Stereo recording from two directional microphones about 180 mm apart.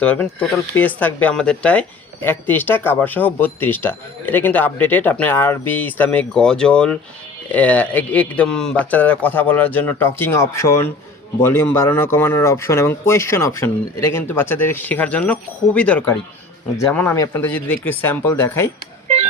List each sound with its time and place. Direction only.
0.0 s speech: 5° left (ahead or behind)